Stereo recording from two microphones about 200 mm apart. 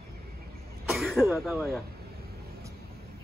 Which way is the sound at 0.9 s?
Centre (ahead or behind).